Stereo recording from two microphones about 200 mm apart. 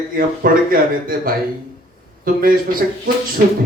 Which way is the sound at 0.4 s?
45° right (ahead or behind).